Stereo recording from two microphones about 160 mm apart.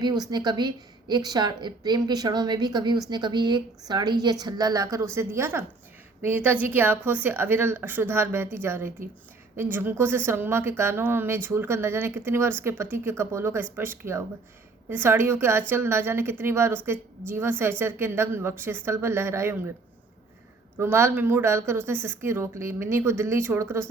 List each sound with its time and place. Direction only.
0.0 s a woman's voice: 25° right (ahead or behind)
20.7 s a woman's voice: 15° right (ahead or behind)